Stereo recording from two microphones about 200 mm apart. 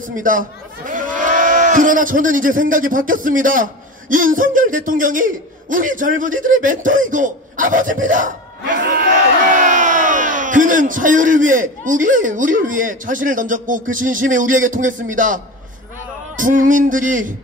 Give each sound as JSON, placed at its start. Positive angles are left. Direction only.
{"t": 0.0, "sound": "a man's voice", "side_deg": -40}